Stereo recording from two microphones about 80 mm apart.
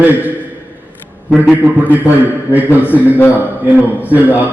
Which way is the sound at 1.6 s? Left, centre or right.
Right.